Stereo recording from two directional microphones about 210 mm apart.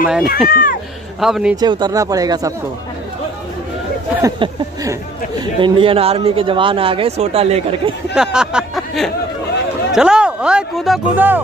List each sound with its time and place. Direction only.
0.0 s speech: 5° right (ahead or behind)
0.5 s speech: 40° left (ahead or behind)
1.2 s speech: 5° right (ahead or behind)
1.6 s speech: 20° right (ahead or behind)
4.2 s speech: 15° right (ahead or behind)
8.1 s speech: 5° right (ahead or behind)